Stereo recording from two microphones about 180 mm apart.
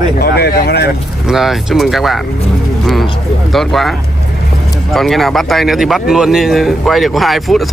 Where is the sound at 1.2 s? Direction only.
Centre (ahead or behind).